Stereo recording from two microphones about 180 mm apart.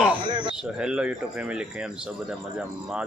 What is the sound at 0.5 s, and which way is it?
Speech, 5° right (ahead or behind).